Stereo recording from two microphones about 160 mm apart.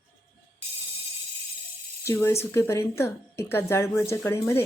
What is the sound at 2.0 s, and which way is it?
Speech, 15° left (ahead or behind).